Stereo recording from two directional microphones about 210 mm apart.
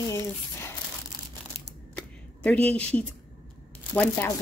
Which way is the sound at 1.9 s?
5° left (ahead or behind).